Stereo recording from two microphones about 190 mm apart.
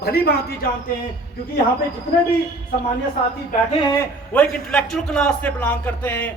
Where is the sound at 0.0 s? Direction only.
55° left (ahead or behind).